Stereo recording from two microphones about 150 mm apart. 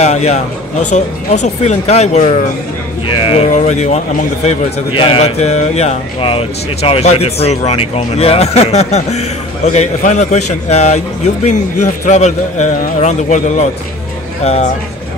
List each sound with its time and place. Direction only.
0.0 s a man's voice: 45° left (ahead or behind)
3.2 s speech: 35° left (ahead or behind)
3.5 s a man's voice: 50° left (ahead or behind)